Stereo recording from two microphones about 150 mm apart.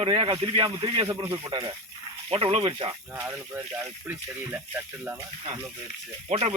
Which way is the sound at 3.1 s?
15° right (ahead or behind).